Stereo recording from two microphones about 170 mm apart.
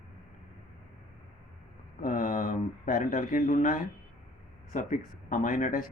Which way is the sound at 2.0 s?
50° left (ahead or behind).